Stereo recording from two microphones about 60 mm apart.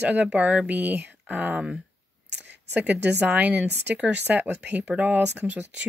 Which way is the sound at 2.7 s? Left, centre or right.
Right.